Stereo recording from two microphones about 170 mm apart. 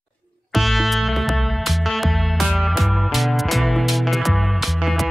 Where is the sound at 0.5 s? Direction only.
Centre (ahead or behind).